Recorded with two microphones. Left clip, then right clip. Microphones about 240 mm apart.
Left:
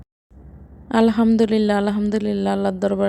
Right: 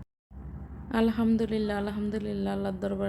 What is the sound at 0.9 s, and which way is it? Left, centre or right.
A woman's voice, left.